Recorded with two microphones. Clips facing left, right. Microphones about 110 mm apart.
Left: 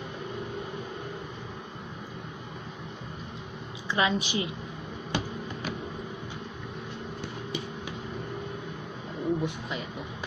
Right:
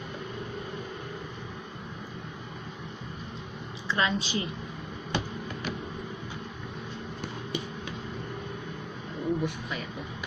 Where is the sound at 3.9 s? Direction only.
15° left (ahead or behind).